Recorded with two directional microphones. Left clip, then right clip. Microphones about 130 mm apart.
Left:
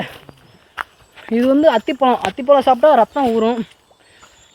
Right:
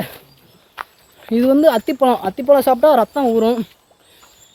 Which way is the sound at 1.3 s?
40° right (ahead or behind).